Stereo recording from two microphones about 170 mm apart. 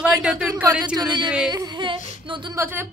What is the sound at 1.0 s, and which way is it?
Speech, 25° right (ahead or behind).